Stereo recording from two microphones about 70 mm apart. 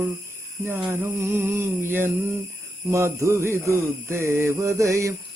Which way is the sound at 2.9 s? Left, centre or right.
Right.